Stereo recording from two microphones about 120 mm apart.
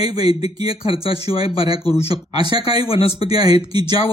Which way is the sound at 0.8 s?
50° left (ahead or behind).